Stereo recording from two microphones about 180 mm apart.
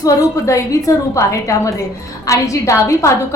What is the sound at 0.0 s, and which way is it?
A woman's voice, 15° left (ahead or behind).